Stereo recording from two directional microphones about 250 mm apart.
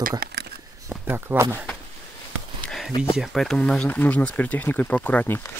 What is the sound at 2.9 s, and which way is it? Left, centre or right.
Speech, centre.